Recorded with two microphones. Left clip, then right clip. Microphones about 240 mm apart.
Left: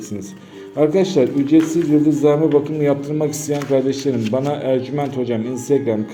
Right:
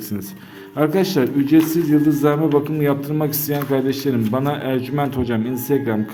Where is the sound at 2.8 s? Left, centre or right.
Right.